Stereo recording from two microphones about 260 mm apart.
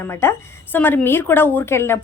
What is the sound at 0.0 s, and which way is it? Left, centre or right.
A woman's voice, centre.